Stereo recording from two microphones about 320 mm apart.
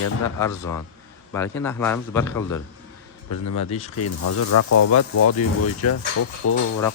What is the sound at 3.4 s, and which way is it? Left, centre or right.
Speech, left.